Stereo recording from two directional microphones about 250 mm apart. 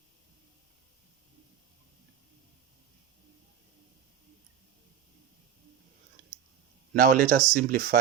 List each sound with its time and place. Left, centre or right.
6.9 s speech: right